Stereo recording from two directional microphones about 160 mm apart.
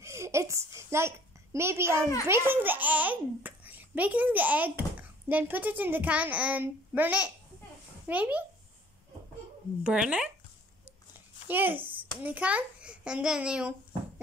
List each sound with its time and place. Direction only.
0.0 s a woman's voice: 20° right (ahead or behind)
9.8 s a child's voice: 5° right (ahead or behind)
11.1 s a sound: 10° right (ahead or behind)
12.2 s a child's voice: 10° right (ahead or behind)